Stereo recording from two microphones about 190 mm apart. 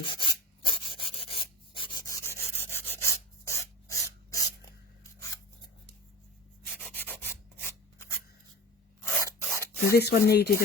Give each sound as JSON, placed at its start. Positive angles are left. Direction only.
{"t": 0.0, "sound": "rub", "side_deg": 25}
{"t": 6.7, "sound": "rub", "side_deg": 10}
{"t": 9.9, "sound": "speech", "side_deg": 60}